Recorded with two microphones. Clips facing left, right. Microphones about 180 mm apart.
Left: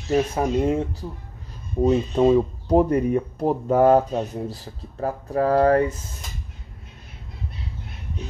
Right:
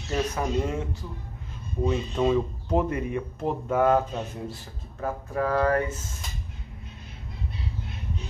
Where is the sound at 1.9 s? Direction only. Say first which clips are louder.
Left 7 dB; 35° left (ahead or behind).